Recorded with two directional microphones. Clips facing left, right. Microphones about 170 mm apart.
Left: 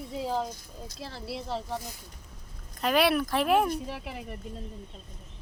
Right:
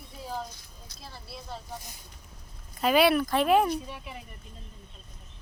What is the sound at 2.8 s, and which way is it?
Speech, centre (ahead or behind).